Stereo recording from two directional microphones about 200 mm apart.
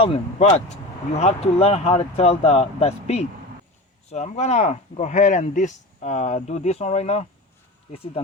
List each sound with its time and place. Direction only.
0.0 s speech: 30° left (ahead or behind)